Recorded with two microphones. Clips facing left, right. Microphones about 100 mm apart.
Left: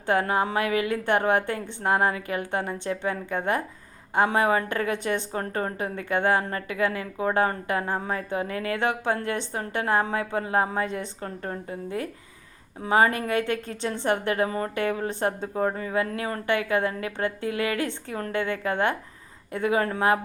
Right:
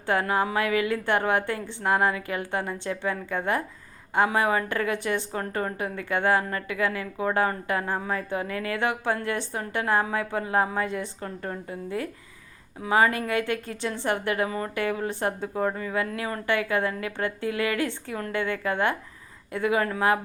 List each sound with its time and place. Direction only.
0.0 s a woman's voice: 25° left (ahead or behind)
5.4 s a woman's voice: 30° left (ahead or behind)